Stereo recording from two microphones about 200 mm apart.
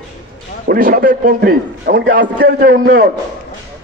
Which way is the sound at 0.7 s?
45° right (ahead or behind).